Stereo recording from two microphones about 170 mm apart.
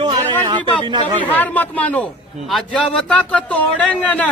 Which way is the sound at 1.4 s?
10° left (ahead or behind).